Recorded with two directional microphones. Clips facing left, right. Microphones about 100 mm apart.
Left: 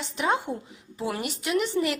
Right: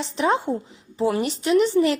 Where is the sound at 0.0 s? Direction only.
30° right (ahead or behind).